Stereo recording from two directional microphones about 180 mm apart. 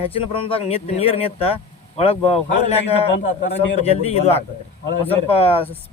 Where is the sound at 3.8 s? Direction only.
35° left (ahead or behind).